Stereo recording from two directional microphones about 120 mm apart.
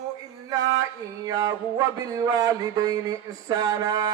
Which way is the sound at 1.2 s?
35° right (ahead or behind).